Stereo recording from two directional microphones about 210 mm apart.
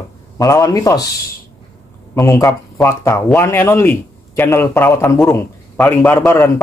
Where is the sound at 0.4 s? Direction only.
15° left (ahead or behind).